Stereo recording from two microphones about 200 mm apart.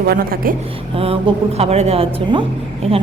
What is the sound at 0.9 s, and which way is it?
A woman's voice, 30° right (ahead or behind).